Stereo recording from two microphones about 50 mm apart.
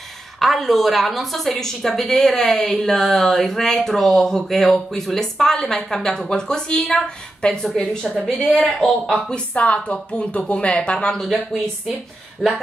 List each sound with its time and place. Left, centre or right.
0.4 s a woman's voice: centre
9.3 s a woman's voice: left
11.9 s a woman's voice: centre